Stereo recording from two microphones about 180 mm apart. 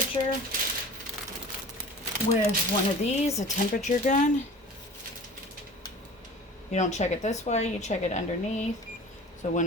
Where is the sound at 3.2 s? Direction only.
40° left (ahead or behind).